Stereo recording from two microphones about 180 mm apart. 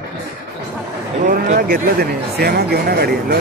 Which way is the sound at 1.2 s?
45° right (ahead or behind).